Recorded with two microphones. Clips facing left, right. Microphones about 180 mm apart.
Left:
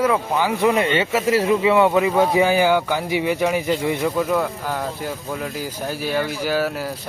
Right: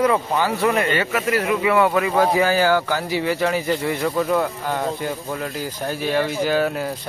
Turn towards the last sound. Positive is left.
turn(degrees=5)  # may be behind; listen again after turning